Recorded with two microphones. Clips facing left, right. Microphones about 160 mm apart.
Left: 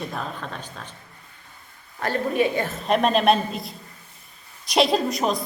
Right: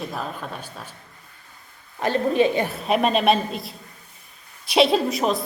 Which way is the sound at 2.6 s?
5° right (ahead or behind).